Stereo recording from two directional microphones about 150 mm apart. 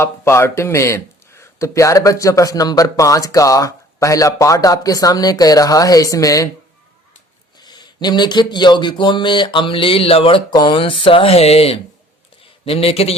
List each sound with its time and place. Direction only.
0.0 s speech: 15° left (ahead or behind)
7.6 s speech: 30° left (ahead or behind)